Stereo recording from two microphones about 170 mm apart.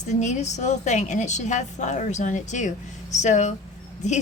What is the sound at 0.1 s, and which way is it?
A woman's voice, 45° left (ahead or behind).